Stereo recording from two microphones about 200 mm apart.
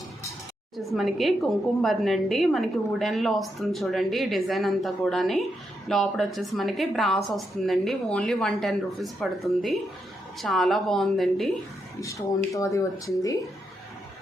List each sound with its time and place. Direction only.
0.8 s a woman's voice: centre (ahead or behind)
11.9 s speech: 15° left (ahead or behind)